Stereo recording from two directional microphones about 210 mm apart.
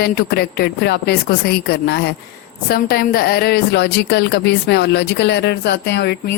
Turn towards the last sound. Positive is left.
turn(degrees=50)  # may be behind; listen again after turning